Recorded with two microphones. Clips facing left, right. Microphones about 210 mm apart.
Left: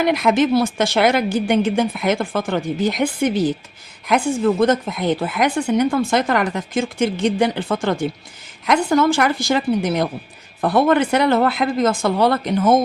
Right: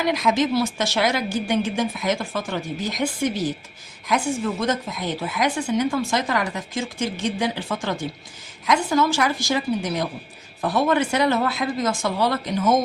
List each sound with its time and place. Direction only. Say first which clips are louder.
0.0 s speech: left 5 dB; 60° left (ahead or behind)